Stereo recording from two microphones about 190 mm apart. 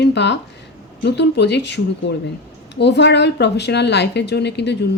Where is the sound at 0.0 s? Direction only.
65° left (ahead or behind).